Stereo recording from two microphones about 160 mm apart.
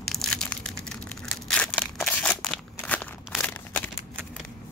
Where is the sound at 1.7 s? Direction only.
5° left (ahead or behind).